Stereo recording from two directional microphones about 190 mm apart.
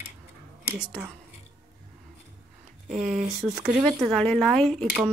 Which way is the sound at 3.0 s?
40° right (ahead or behind).